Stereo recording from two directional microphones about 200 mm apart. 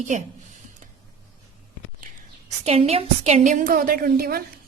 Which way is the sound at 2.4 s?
30° right (ahead or behind).